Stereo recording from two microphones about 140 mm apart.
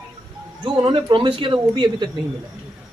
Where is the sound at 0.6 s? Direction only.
35° right (ahead or behind).